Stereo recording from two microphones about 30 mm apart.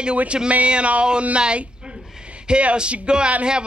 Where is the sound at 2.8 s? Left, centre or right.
Right.